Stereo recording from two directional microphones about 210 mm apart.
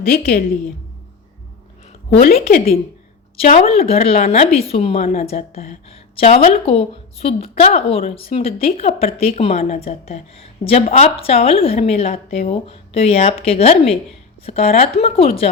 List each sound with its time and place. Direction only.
2.2 s a woman's voice: 45° left (ahead or behind)
3.4 s a woman's voice: 30° left (ahead or behind)